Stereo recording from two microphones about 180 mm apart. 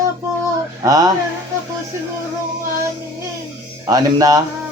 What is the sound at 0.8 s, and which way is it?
Speech, 20° right (ahead or behind).